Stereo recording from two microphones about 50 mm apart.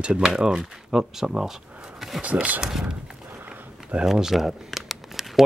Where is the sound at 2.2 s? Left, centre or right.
Right.